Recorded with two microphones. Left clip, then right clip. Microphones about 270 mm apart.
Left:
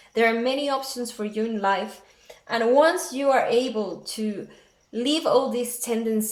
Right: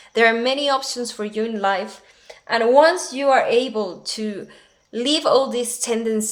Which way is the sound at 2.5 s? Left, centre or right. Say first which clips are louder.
Right 5 dB; right.